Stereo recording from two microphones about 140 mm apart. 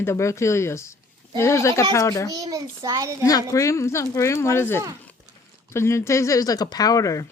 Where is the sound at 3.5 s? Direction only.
20° left (ahead or behind).